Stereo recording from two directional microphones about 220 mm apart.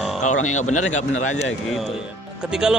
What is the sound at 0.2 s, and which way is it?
Speech, 35° left (ahead or behind).